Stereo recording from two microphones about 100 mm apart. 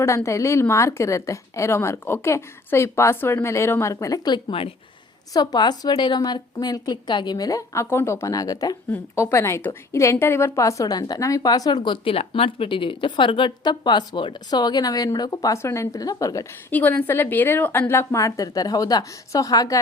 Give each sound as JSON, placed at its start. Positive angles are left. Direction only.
{"t": 0.0, "sound": "a woman's voice", "side_deg": 30}
{"t": 16.7, "sound": "a woman's voice", "side_deg": 15}